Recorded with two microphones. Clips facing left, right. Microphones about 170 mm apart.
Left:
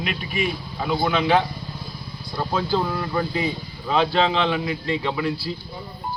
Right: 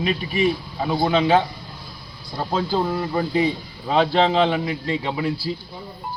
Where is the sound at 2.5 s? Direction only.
25° right (ahead or behind).